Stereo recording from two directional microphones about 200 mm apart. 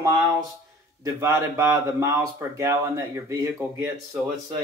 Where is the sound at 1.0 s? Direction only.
15° right (ahead or behind).